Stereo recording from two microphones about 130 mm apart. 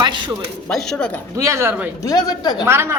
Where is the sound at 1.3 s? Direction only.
20° right (ahead or behind).